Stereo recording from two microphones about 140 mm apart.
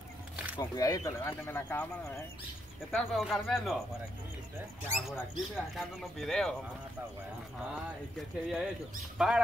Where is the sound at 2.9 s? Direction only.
Centre (ahead or behind).